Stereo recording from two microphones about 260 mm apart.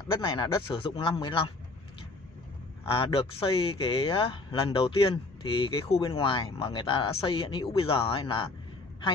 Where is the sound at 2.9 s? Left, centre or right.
Left.